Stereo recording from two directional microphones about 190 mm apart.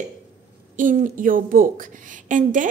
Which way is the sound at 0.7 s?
45° right (ahead or behind).